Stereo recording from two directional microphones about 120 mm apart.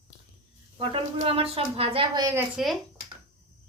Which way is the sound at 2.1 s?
30° right (ahead or behind).